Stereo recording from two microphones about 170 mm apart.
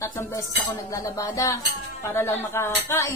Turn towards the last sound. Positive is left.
turn(degrees=15)  # may be behind; listen again after turning